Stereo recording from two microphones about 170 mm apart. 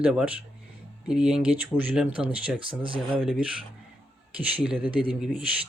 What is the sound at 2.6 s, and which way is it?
Speech, 30° right (ahead or behind).